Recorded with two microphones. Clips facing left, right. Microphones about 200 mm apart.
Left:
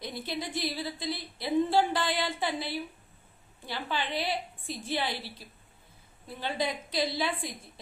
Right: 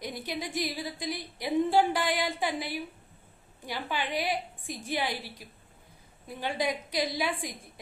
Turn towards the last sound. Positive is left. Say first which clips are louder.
# even
turn(degrees=-15)  # may be behind; listen again after turning